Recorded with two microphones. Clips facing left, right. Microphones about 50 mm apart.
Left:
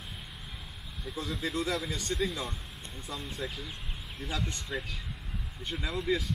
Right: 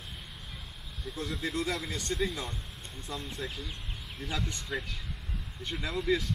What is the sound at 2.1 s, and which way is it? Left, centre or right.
Speech, centre.